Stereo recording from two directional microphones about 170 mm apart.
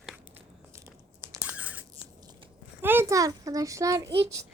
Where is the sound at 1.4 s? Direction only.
10° right (ahead or behind).